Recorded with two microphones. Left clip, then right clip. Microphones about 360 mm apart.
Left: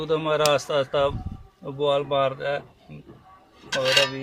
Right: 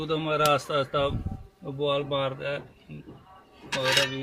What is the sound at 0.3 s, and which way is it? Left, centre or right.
Speech, centre.